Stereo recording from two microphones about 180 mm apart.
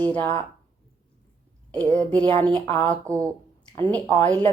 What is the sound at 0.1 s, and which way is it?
Speech, 10° left (ahead or behind).